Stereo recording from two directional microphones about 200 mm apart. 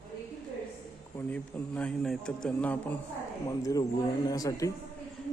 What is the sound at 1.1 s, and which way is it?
A man's voice, 5° left (ahead or behind).